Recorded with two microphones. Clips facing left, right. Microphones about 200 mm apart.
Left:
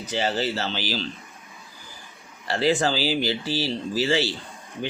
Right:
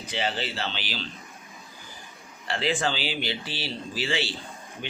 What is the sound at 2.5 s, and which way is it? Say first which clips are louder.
Speech: left 5 dB; 40° left (ahead or behind).